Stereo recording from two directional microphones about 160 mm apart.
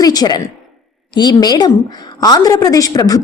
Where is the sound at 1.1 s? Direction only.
25° left (ahead or behind).